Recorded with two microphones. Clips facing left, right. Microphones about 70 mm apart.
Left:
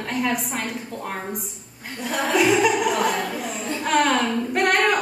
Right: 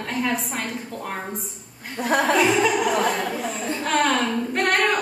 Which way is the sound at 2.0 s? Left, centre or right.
Right.